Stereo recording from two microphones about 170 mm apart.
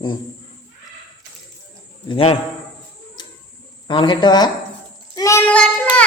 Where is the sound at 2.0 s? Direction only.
30° left (ahead or behind).